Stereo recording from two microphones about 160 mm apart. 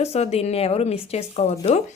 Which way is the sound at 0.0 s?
40° left (ahead or behind).